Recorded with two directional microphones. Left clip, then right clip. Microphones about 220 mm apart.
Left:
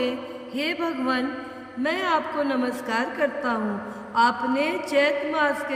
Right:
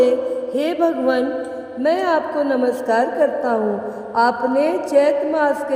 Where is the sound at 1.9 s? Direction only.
20° left (ahead or behind).